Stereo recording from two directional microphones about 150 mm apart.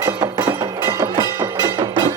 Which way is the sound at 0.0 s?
30° right (ahead or behind).